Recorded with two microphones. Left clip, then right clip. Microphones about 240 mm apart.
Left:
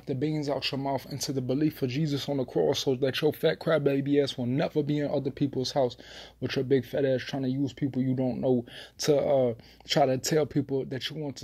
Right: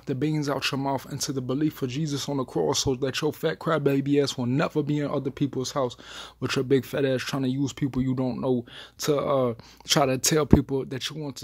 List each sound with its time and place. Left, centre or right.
0.1 s speech: right